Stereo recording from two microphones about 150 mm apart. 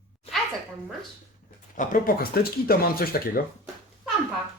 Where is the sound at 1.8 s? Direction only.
70° left (ahead or behind).